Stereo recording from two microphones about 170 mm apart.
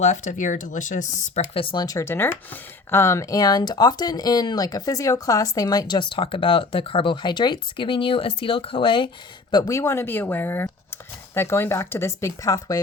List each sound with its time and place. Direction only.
0.0 s speech: 45° left (ahead or behind)
1.5 s speech: 30° left (ahead or behind)